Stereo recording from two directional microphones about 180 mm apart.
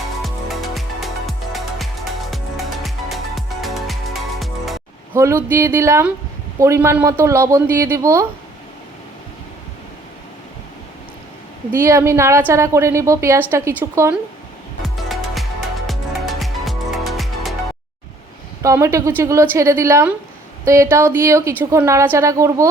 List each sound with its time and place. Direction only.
0.2 s music: centre (ahead or behind)
5.1 s speech: 15° right (ahead or behind)
11.8 s speech: 15° right (ahead or behind)
14.8 s music: centre (ahead or behind)
18.6 s speech: 15° right (ahead or behind)